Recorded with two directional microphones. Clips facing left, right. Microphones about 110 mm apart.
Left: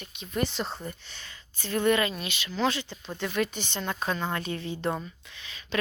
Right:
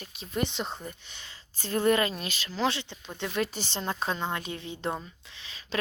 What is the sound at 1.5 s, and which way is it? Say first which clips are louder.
Speech: even; 35° right (ahead or behind).